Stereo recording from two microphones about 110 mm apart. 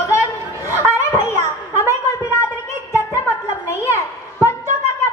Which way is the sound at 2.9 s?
25° left (ahead or behind).